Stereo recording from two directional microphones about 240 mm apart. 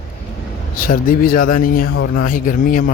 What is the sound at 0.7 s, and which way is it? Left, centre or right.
Speech, left.